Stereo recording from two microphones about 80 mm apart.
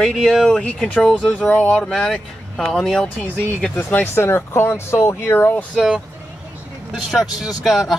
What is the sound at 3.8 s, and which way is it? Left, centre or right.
Speech, left.